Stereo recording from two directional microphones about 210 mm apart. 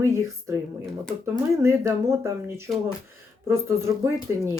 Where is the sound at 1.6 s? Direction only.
15° right (ahead or behind).